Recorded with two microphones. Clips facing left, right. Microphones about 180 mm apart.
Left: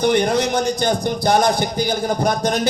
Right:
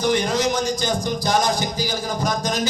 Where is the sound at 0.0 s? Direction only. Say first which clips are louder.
Left 3 dB; 60° left (ahead or behind).